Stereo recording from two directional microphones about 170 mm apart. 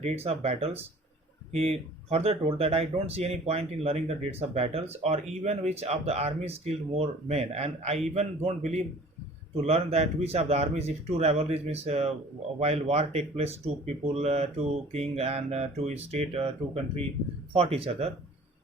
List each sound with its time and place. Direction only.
0.0 s speech: 35° right (ahead or behind)